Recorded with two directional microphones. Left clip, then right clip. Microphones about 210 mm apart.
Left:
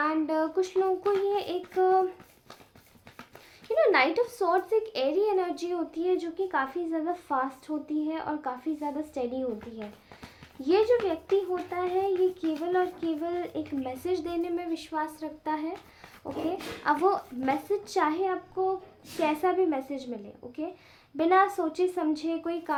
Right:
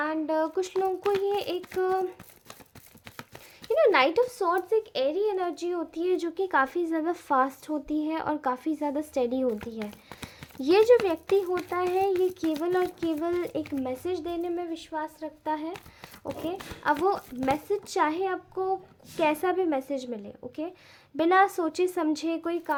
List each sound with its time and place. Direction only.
0.0 s speech: 25° right (ahead or behind)
3.7 s a woman's voice: 30° right (ahead or behind)
21.2 s a woman's voice: 30° right (ahead or behind)